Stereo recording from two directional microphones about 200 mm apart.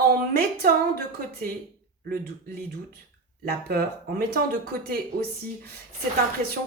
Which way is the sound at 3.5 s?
50° right (ahead or behind).